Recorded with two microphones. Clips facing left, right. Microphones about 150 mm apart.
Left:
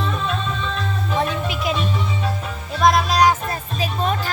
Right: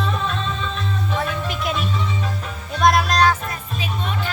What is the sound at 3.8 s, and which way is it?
Music, 40° left (ahead or behind).